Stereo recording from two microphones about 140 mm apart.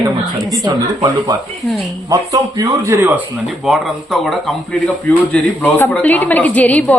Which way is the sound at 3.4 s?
Centre (ahead or behind).